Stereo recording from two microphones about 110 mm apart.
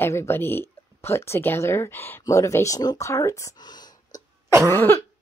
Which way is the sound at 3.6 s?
40° left (ahead or behind).